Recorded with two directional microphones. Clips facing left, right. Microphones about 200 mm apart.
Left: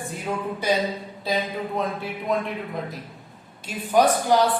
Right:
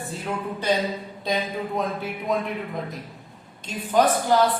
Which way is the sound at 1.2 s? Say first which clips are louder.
Even; centre (ahead or behind).